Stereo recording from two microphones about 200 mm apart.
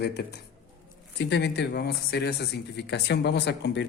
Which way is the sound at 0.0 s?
55° left (ahead or behind).